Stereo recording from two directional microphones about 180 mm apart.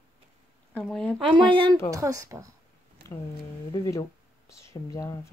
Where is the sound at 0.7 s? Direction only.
5° left (ahead or behind).